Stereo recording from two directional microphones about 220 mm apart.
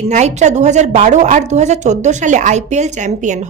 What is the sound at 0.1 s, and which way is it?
A woman's voice, 30° right (ahead or behind).